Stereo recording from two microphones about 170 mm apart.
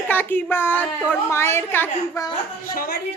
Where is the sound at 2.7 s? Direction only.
60° left (ahead or behind).